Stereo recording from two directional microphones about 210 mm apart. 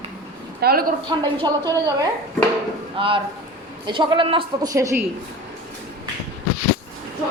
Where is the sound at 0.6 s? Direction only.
45° right (ahead or behind).